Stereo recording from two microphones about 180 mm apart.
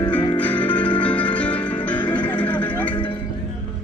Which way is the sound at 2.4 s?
10° left (ahead or behind).